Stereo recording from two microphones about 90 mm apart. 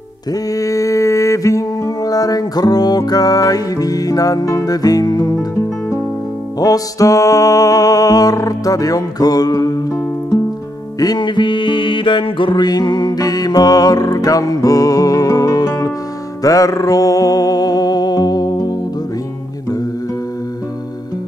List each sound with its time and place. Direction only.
0.3 s mantra: 40° left (ahead or behind)
6.6 s music: 40° left (ahead or behind)
11.0 s music: 50° left (ahead or behind)